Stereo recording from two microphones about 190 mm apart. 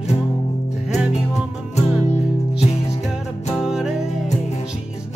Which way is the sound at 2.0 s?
35° left (ahead or behind).